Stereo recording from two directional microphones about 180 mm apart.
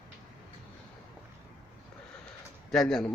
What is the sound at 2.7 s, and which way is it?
Speech, centre (ahead or behind).